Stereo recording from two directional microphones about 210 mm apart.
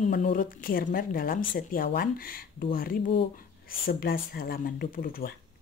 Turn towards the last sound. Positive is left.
turn(degrees=45)  # may be behind; listen again after turning